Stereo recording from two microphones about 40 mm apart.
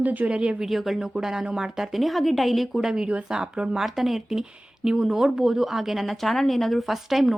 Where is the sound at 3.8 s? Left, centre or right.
Centre.